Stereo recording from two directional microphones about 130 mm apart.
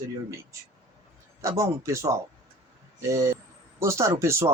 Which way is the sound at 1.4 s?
25° right (ahead or behind).